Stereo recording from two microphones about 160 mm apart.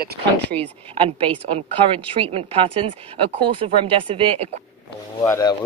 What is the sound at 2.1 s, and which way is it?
Speech, 35° right (ahead or behind).